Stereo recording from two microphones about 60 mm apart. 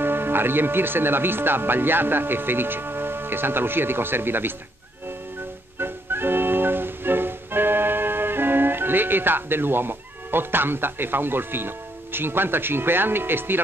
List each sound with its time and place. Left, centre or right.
0.0 s speech: right
5.8 s music: right